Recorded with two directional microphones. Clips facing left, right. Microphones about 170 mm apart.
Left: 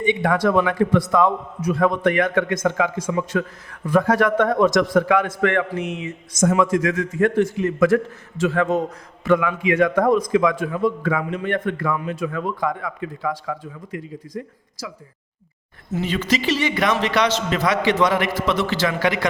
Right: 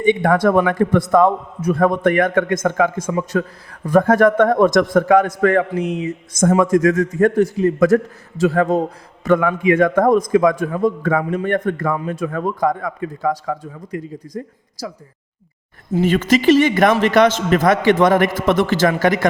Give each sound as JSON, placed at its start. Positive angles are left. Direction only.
{"t": 0.0, "sound": "a man's voice", "side_deg": -50}
{"t": 3.2, "sound": "a man's voice", "side_deg": -35}
{"t": 9.2, "sound": "a man's voice", "side_deg": -50}
{"t": 16.0, "sound": "a man's voice", "side_deg": -50}